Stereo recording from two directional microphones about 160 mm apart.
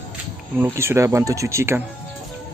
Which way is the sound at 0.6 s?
15° right (ahead or behind).